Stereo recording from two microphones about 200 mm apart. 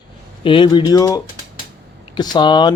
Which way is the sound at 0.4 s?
25° left (ahead or behind).